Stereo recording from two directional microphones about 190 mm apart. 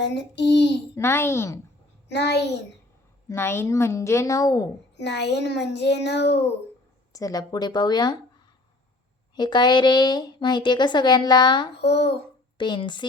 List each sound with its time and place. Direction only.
0.0 s a child's voice: 65° left (ahead or behind)
0.9 s a woman's voice: 15° left (ahead or behind)
2.0 s a child's voice: 60° left (ahead or behind)
3.2 s a woman's voice: 10° left (ahead or behind)
4.9 s a child's voice: 65° left (ahead or behind)
7.1 s a woman's voice: 20° left (ahead or behind)
9.3 s a woman's voice: 25° left (ahead or behind)
11.8 s a child's voice: 60° left (ahead or behind)
12.5 s a woman's voice: 25° left (ahead or behind)